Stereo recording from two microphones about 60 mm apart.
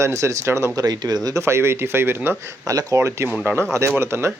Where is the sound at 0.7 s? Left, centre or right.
Right.